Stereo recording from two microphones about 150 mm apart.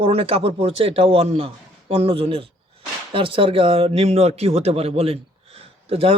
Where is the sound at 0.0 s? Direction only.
35° right (ahead or behind).